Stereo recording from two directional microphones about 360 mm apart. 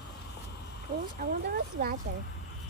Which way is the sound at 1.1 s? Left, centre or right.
Right.